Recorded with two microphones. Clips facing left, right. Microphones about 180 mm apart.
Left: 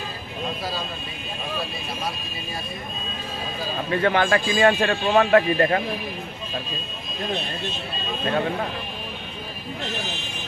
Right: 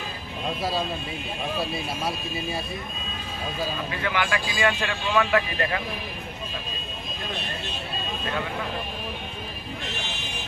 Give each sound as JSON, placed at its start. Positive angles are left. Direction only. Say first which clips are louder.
{"t": 4.0, "sound": "speech", "louder": "left 7 dB", "side_deg": 45}